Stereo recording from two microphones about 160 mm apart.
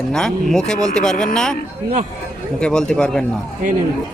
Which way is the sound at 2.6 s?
5° left (ahead or behind).